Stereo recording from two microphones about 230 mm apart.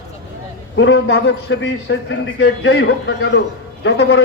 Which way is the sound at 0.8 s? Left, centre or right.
Left.